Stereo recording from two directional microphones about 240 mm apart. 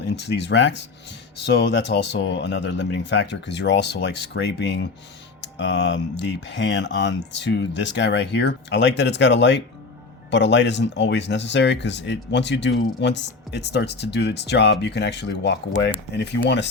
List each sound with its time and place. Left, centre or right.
0.2 s speech: left